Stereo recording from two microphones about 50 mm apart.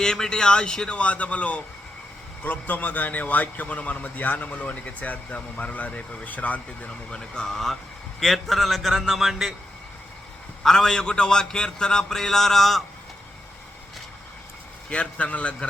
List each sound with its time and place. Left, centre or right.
0.0 s a man's voice: centre; by 6.9 s left
7.1 s a man's voice: centre
10.6 s a man's voice: centre
14.8 s a man's voice: left